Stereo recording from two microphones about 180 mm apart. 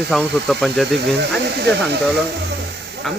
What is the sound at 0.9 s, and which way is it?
Speech, 70° right (ahead or behind).